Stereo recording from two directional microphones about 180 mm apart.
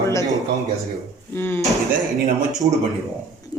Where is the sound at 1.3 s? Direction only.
10° left (ahead or behind).